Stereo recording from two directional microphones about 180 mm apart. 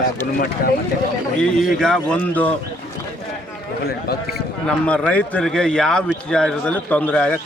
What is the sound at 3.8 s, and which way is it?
Speech, 60° left (ahead or behind).